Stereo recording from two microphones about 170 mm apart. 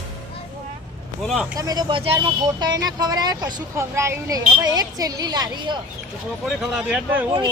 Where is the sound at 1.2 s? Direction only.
Centre (ahead or behind).